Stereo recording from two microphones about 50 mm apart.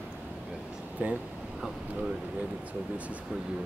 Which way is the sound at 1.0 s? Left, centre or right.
Right.